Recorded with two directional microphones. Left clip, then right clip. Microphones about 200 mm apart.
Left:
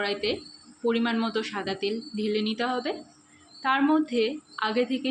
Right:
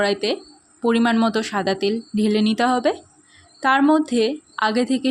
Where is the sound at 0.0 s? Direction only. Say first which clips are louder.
Right 7 dB; 55° right (ahead or behind).